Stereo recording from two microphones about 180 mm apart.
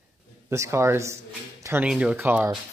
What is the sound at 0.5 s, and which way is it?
Speech, 15° right (ahead or behind).